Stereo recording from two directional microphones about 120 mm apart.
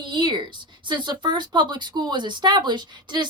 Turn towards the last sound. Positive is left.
turn(degrees=-40)  # may be behind; listen again after turning